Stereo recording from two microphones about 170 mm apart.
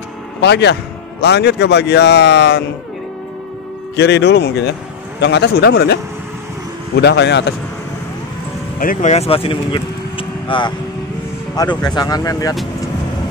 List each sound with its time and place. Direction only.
0.4 s speech: 90° left
3.9 s speech: 90° left; by 5.9 s 75° left (ahead or behind)
7.0 s speech: 85° left
8.7 s speech: 55° left (ahead or behind)
9.1 s speech: 35° left (ahead or behind)
11.8 s speech: 25° left (ahead or behind)